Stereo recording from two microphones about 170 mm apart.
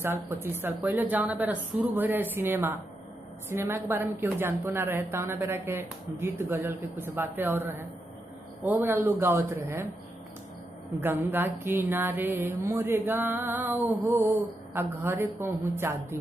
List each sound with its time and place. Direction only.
0.0 s a woman's voice: 15° right (ahead or behind)
11.0 s a woman's voice: 10° right (ahead or behind)